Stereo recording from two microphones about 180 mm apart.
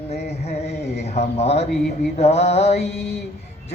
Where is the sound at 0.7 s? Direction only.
65° left (ahead or behind).